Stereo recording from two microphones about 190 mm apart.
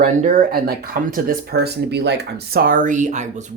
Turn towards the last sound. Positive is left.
turn(degrees=-40)  # may be behind; listen again after turning